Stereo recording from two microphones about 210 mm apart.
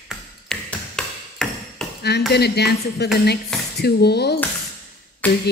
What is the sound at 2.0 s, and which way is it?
A woman's voice, 50° left (ahead or behind).